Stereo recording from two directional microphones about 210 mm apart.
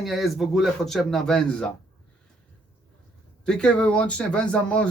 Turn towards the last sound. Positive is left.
turn(degrees=5)  # may be behind; listen again after turning